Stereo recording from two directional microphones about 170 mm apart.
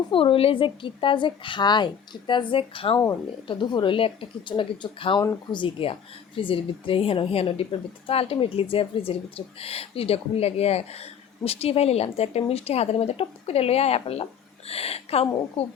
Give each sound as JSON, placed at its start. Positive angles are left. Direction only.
{"t": 0.1, "sound": "speech", "side_deg": 30}
{"t": 5.2, "sound": "speech", "side_deg": 15}
{"t": 5.5, "sound": "speech", "side_deg": 30}